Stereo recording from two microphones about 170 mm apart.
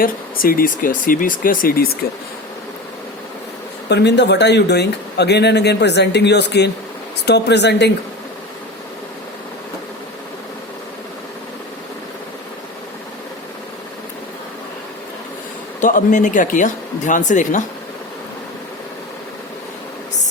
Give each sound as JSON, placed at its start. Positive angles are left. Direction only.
{"t": 0.0, "sound": "speech", "side_deg": 55}
{"t": 3.8, "sound": "speech", "side_deg": 85}
{"t": 15.8, "sound": "speech", "side_deg": 50}